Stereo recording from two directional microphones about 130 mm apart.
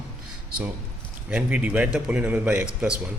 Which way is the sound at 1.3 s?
10° right (ahead or behind).